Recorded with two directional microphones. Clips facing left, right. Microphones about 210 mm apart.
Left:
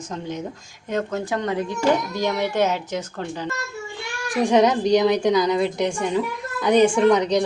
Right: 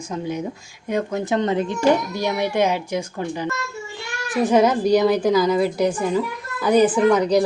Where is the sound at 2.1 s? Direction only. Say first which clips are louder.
Right 1 dB; 10° right (ahead or behind).